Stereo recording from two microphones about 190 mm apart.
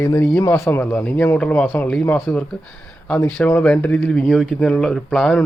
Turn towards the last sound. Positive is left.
turn(degrees=5)  # may be behind; listen again after turning